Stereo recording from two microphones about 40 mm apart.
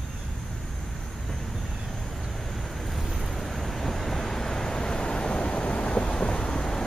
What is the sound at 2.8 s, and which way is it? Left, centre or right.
Vehicle, centre.